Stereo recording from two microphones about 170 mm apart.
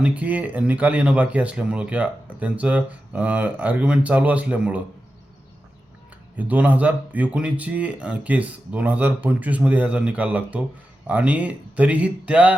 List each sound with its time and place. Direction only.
0.0 s speech: 10° right (ahead or behind)
6.3 s speech: 10° right (ahead or behind)